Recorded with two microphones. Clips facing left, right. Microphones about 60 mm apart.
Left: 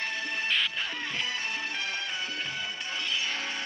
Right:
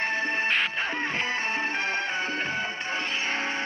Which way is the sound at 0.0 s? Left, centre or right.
Right.